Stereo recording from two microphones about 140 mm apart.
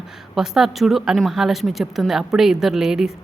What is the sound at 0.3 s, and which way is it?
A woman's voice, 5° right (ahead or behind).